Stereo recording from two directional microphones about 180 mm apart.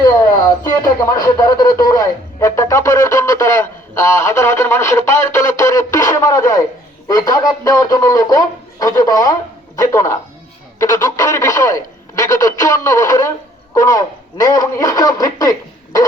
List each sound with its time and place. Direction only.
0.6 s speech: 20° left (ahead or behind)
4.2 s radio: 15° left (ahead or behind)
7.1 s a man's voice: 20° left (ahead or behind)